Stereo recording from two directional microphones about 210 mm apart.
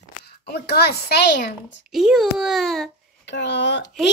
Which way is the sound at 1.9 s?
Centre (ahead or behind).